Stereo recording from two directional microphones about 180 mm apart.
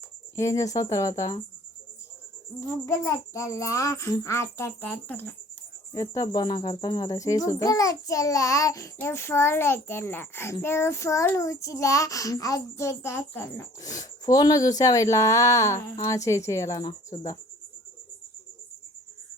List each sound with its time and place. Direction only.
0.3 s a child's voice: 15° left (ahead or behind)
2.6 s a child's voice: 15° left (ahead or behind)